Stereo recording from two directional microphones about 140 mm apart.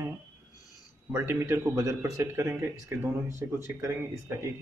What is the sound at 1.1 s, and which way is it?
Speech, 15° right (ahead or behind).